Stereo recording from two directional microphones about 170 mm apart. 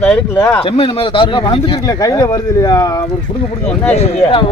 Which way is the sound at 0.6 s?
35° left (ahead or behind).